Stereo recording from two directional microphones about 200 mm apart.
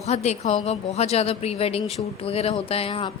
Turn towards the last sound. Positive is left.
turn(degrees=30)  # may be behind; listen again after turning